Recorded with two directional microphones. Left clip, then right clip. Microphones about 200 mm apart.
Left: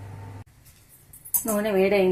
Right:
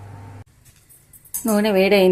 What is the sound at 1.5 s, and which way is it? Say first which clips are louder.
Speech: right 5 dB; 55° right (ahead or behind).